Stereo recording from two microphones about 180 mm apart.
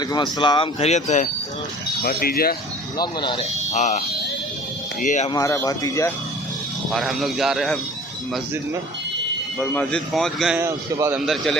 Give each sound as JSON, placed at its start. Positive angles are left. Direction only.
{"t": 0.0, "sound": "speech", "side_deg": 20}
{"t": 2.0, "sound": "speech", "side_deg": 55}
{"t": 3.0, "sound": "speech", "side_deg": 25}
{"t": 3.7, "sound": "speech", "side_deg": 40}
{"t": 5.3, "sound": "speech", "side_deg": 15}
{"t": 6.9, "sound": "a man's voice", "side_deg": 0}
{"t": 9.7, "sound": "a man's voice", "side_deg": 5}
{"t": 10.6, "sound": "a man's voice", "side_deg": -15}